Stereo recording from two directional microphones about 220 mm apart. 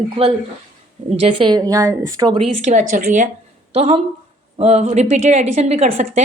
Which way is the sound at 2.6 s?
30° right (ahead or behind).